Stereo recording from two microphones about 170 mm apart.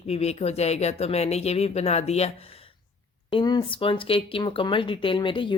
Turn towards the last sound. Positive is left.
turn(degrees=30)  # may be behind; listen again after turning